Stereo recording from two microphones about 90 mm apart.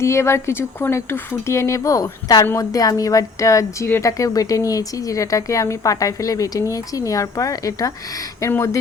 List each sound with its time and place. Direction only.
0.0 s speech: 30° left (ahead or behind)